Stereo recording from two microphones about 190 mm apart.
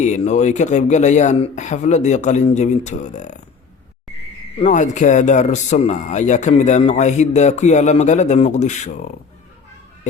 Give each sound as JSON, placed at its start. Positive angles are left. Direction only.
{"t": 0.0, "sound": "speech", "side_deg": 40}
{"t": 4.6, "sound": "speech", "side_deg": 40}